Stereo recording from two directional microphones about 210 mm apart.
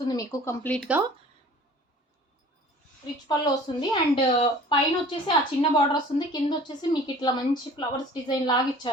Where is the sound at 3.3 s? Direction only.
20° left (ahead or behind).